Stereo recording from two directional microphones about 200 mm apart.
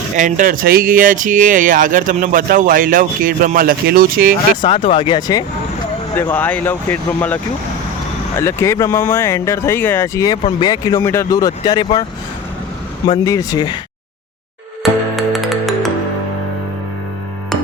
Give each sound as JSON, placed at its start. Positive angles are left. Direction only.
{"t": 0.2, "sound": "speech", "side_deg": -40}
{"t": 4.6, "sound": "speech", "side_deg": 25}
{"t": 6.1, "sound": "speech", "side_deg": 10}
{"t": 8.4, "sound": "speech", "side_deg": 10}
{"t": 13.1, "sound": "speech", "side_deg": 15}
{"t": 15.1, "sound": "music", "side_deg": 0}